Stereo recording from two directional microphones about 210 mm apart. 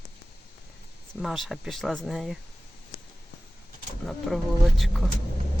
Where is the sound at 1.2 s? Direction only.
Centre (ahead or behind).